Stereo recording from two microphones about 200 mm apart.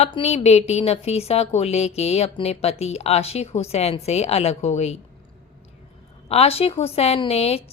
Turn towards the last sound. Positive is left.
turn(degrees=30)  # may be behind; listen again after turning